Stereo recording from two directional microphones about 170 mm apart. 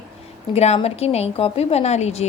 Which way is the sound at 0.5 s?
40° left (ahead or behind).